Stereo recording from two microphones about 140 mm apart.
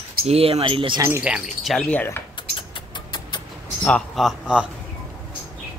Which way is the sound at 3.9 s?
5° left (ahead or behind).